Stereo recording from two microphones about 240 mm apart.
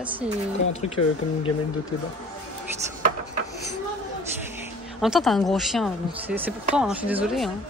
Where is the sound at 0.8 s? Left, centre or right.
Left.